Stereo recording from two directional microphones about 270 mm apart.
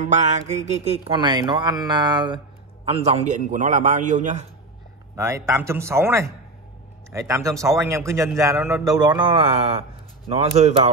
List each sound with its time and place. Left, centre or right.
0.0 s speech: right
5.1 s a man's voice: centre